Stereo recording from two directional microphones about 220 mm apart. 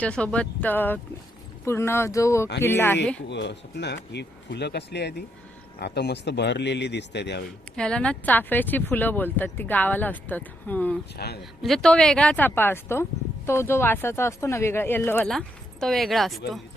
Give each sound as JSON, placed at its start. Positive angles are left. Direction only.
{"t": 0.0, "sound": "speech", "side_deg": 5}
{"t": 3.2, "sound": "speech", "side_deg": 50}
{"t": 7.8, "sound": "speech", "side_deg": 5}